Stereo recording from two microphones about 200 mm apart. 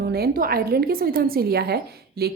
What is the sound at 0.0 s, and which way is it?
A woman's voice, 50° right (ahead or behind).